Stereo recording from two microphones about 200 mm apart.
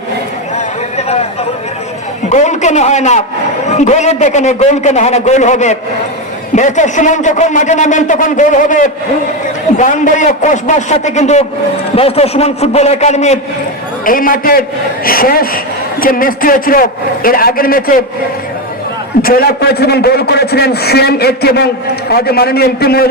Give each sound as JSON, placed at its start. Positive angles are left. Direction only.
{"t": 0.9, "sound": "a sound", "side_deg": 35}
{"t": 2.3, "sound": "a man's voice", "side_deg": 35}
{"t": 19.2, "sound": "a man's voice", "side_deg": 50}